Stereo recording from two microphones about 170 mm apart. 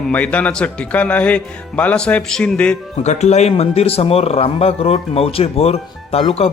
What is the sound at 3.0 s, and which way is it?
Speech, 40° left (ahead or behind).